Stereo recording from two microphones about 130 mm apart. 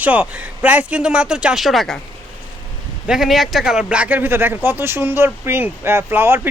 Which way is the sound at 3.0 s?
5° right (ahead or behind).